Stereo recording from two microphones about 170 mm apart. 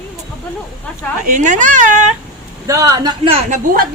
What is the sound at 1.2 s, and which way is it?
Speech, 50° right (ahead or behind).